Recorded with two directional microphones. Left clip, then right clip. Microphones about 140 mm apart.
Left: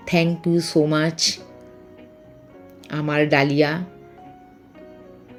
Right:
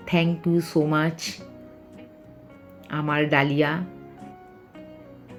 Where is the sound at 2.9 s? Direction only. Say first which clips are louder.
Left 4 dB; 35° left (ahead or behind).